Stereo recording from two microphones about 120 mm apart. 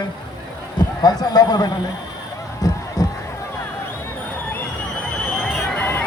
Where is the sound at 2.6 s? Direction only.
30° left (ahead or behind).